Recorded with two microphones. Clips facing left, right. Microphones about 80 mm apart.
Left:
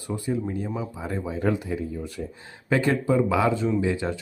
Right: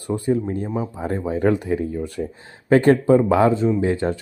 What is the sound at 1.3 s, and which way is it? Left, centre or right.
Speech, right.